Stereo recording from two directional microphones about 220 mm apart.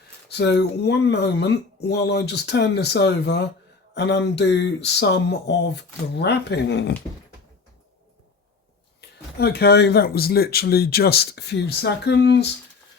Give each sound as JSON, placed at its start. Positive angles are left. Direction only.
{"t": 0.3, "sound": "speech", "side_deg": 50}
{"t": 9.0, "sound": "speech", "side_deg": 45}